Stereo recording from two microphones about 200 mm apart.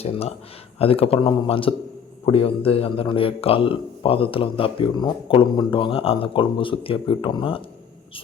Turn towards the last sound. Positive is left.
turn(degrees=25)  # may be behind; listen again after turning